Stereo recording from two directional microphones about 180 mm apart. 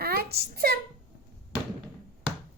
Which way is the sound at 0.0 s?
60° right (ahead or behind).